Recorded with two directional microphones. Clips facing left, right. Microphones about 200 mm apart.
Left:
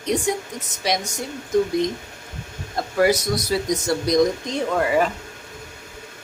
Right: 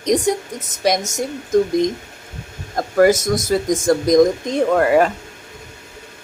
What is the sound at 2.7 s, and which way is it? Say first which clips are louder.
Speech: right 5 dB; 45° right (ahead or behind).